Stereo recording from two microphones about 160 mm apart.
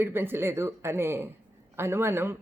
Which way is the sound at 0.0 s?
15° right (ahead or behind).